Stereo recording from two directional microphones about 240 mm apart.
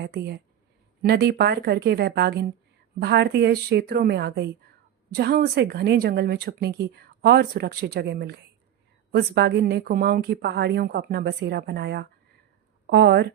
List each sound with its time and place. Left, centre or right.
0.0 s a woman's voice: right